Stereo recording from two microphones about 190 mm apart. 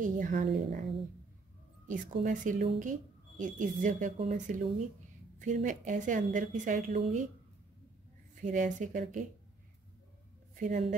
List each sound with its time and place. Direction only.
0.0 s a woman's voice: 45° right (ahead or behind)
1.9 s a woman's voice: 45° right (ahead or behind)
8.4 s speech: 40° right (ahead or behind)
10.6 s speech: 40° right (ahead or behind)